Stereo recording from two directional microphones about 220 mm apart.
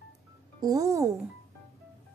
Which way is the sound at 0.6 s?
15° right (ahead or behind).